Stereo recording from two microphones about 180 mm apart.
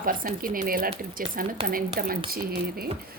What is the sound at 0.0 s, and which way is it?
A woman's voice, 50° right (ahead or behind).